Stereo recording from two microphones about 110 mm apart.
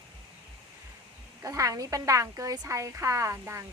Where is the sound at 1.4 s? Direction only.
30° right (ahead or behind).